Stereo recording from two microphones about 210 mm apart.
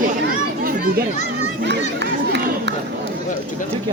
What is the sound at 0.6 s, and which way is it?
Children playing, 45° right (ahead or behind).